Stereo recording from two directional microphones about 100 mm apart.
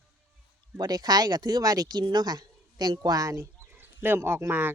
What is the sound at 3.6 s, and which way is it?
Speech, 20° right (ahead or behind).